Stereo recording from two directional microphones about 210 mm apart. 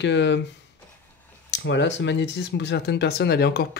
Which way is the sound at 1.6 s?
60° left (ahead or behind).